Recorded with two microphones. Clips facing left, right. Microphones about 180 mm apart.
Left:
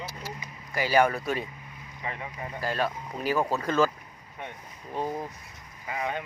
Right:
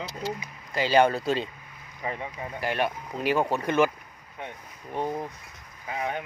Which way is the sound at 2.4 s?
20° right (ahead or behind).